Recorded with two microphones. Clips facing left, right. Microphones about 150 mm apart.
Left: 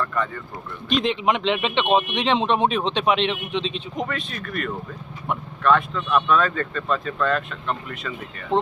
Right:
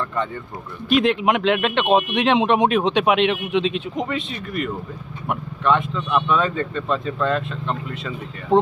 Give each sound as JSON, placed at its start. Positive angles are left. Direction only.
{"t": 0.9, "sound": "speech", "side_deg": -5}
{"t": 3.9, "sound": "speech", "side_deg": -20}